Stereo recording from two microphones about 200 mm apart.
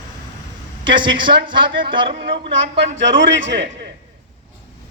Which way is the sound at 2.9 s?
65° right (ahead or behind).